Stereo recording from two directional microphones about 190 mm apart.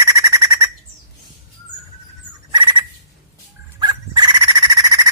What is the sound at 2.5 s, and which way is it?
Fowl, 25° right (ahead or behind).